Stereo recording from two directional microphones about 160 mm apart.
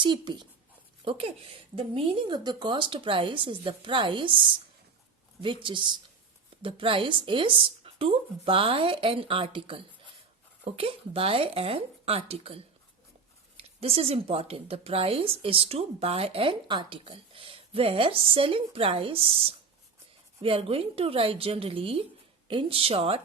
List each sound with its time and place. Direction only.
0.0 s a woman's voice: 30° right (ahead or behind)